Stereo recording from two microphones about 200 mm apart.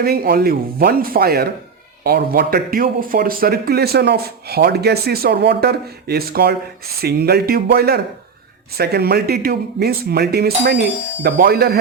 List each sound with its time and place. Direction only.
0.0 s speech: 50° right (ahead or behind)